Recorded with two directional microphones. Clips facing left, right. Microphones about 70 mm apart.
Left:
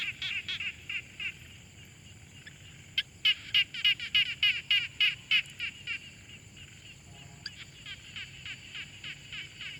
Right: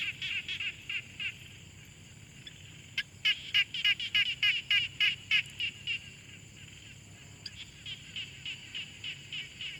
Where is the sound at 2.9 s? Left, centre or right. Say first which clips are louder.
Left 1 dB; centre.